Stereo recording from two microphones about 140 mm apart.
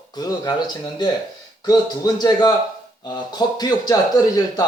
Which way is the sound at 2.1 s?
30° left (ahead or behind).